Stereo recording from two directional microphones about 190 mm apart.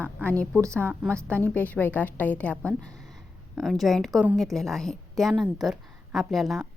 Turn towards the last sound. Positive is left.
turn(degrees=0)  # may be behind; listen again after turning